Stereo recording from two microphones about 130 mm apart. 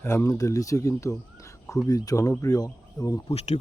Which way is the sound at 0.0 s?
20° left (ahead or behind).